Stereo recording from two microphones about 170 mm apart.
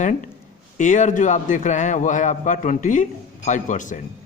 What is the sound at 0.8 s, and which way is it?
A man's voice, 45° left (ahead or behind).